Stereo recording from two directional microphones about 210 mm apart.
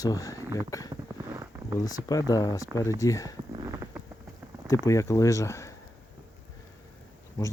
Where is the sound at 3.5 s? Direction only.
15° right (ahead or behind).